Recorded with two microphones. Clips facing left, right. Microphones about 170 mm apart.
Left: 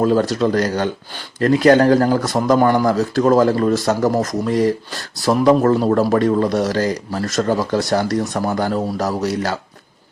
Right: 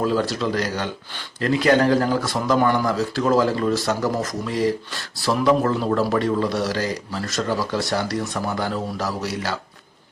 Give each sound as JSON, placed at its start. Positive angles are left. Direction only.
{"t": 0.0, "sound": "speech", "side_deg": 45}